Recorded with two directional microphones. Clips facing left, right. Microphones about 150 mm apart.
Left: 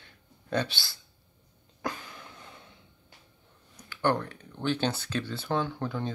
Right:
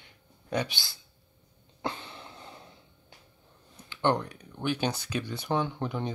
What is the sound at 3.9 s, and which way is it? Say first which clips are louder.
Speech: right 1 dB; 20° right (ahead or behind).